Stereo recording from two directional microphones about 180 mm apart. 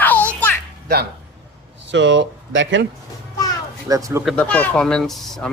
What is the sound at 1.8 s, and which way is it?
Speech, 90° right.